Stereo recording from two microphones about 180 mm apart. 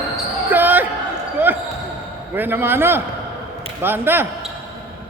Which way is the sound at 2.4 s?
10° right (ahead or behind).